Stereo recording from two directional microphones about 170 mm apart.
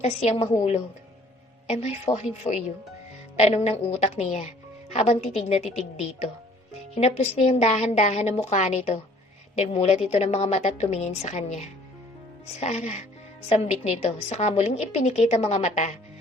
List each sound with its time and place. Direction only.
0.0 s a woman's voice: 40° left (ahead or behind)
6.9 s a woman's voice: 40° left (ahead or behind)